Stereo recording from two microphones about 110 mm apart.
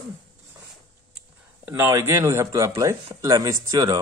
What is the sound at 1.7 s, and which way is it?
Speech, 20° right (ahead or behind).